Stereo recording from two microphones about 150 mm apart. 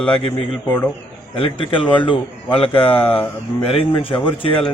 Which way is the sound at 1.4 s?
35° left (ahead or behind).